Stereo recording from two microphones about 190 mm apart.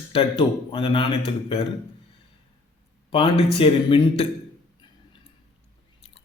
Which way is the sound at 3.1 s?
30° left (ahead or behind).